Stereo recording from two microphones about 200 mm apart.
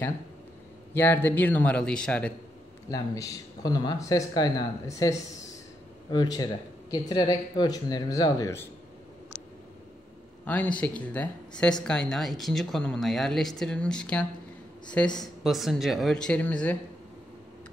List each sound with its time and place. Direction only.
0.9 s speech: 10° left (ahead or behind)
2.9 s speech: 20° left (ahead or behind)
10.4 s speech: 10° left (ahead or behind)